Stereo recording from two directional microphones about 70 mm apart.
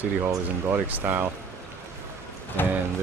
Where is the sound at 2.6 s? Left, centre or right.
Left.